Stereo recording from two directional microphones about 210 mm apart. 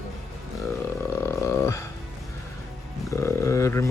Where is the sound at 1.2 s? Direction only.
15° left (ahead or behind).